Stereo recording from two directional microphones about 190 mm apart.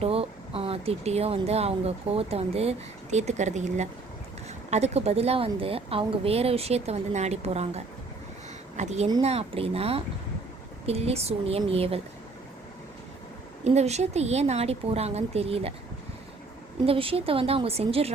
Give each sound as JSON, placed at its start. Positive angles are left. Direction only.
{"t": 0.0, "sound": "a woman's voice", "side_deg": -30}
{"t": 13.7, "sound": "a woman's voice", "side_deg": -35}
{"t": 16.8, "sound": "a woman's voice", "side_deg": -30}